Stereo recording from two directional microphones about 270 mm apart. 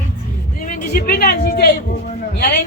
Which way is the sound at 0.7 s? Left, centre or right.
Left.